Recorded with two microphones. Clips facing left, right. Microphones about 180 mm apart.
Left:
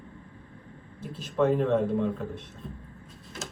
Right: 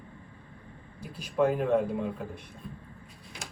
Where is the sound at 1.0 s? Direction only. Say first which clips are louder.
Left 4 dB; 25° left (ahead or behind).